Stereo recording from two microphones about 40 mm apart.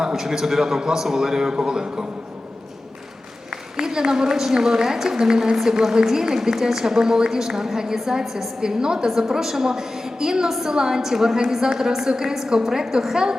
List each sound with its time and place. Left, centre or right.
0.0 s a woman's voice: centre
3.5 s a woman's voice: centre
8.6 s a woman's voice: centre